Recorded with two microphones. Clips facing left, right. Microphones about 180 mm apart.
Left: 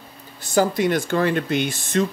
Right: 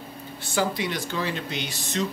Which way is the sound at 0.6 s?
50° left (ahead or behind).